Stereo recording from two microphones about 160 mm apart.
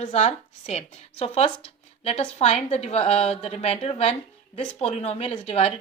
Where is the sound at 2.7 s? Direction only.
40° left (ahead or behind).